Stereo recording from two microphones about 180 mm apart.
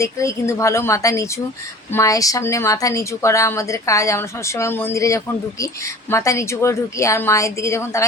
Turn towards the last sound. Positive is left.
turn(degrees=15)  # may be behind; listen again after turning